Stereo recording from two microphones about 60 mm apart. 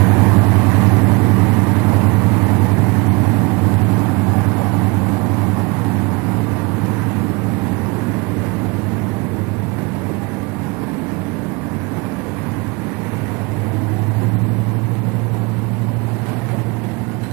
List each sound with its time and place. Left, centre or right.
0.0 s vehicle: right